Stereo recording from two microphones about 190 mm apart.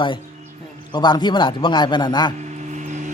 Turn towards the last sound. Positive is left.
turn(degrees=-40)  # may be behind; listen again after turning